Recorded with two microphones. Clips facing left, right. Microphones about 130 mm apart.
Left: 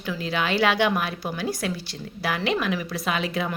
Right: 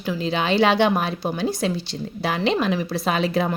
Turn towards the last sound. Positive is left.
turn(degrees=-35)  # may be behind; listen again after turning